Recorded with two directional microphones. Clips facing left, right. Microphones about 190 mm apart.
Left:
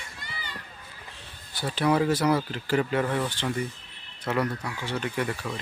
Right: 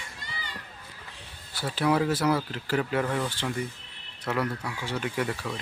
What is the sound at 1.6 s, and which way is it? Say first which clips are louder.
Speech: left 1 dB; 5° right (ahead or behind).